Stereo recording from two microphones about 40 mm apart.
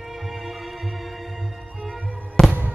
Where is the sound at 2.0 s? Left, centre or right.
Right.